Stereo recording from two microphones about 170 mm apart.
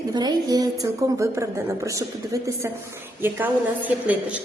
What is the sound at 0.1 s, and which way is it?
A woman's voice, 25° right (ahead or behind).